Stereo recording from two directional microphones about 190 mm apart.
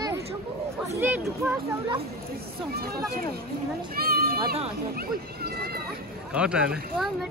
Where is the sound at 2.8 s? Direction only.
55° right (ahead or behind).